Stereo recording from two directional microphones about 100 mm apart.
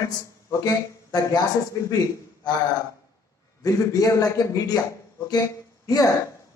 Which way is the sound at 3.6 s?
35° left (ahead or behind).